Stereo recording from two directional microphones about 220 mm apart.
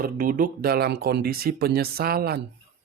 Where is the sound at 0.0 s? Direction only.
40° right (ahead or behind).